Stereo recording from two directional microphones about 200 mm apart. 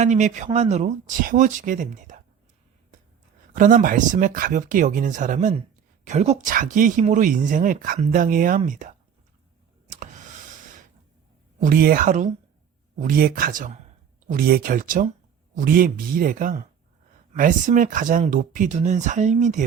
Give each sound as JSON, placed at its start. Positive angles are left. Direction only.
{"t": 0.0, "sound": "speech", "side_deg": -35}
{"t": 3.5, "sound": "speech", "side_deg": -40}
{"t": 11.6, "sound": "speech", "side_deg": -45}